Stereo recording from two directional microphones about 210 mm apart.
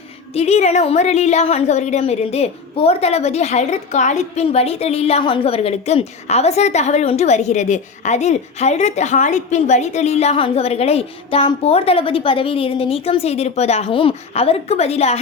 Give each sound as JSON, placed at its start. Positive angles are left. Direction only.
{"t": 0.3, "sound": "a woman's voice", "side_deg": 30}